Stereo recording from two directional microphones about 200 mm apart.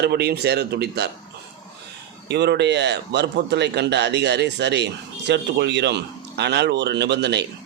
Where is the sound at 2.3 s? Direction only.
60° right (ahead or behind).